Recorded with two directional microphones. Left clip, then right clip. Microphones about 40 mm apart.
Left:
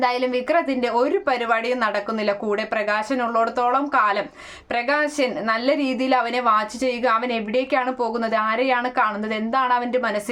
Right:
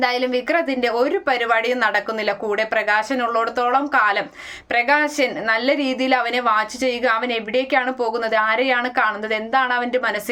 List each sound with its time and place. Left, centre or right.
0.0 s a woman's voice: left